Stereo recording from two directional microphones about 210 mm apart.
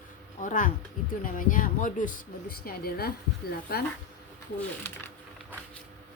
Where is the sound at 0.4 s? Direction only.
40° left (ahead or behind).